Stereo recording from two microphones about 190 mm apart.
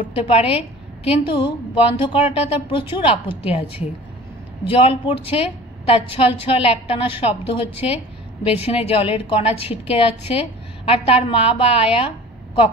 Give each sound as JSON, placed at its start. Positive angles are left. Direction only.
{"t": 0.1, "sound": "a woman's voice", "side_deg": 30}
{"t": 4.6, "sound": "a woman's voice", "side_deg": 30}